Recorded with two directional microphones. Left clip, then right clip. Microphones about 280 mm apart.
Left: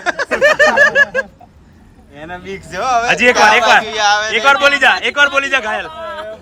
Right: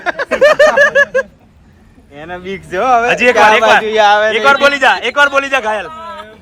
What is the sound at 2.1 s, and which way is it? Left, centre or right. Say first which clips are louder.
Speech: right 3 dB; right.